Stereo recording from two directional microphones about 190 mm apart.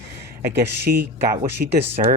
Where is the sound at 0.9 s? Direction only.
50° right (ahead or behind).